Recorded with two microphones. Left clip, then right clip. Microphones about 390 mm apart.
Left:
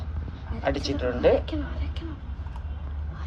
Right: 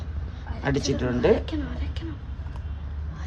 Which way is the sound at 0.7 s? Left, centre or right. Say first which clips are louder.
Right 1 dB; right.